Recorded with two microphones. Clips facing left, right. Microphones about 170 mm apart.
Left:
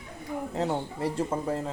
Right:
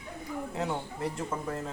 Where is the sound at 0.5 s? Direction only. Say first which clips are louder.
Left 5 dB; 35° left (ahead or behind).